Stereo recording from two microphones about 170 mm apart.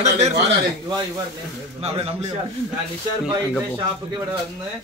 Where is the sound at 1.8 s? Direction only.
35° right (ahead or behind).